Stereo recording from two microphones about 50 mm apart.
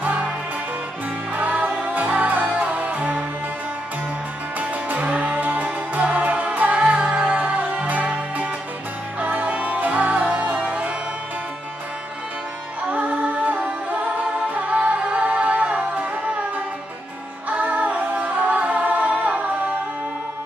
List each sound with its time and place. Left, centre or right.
1.3 s music: right
4.6 s music: right
12.9 s music: right
14.8 s music: right
17.5 s music: right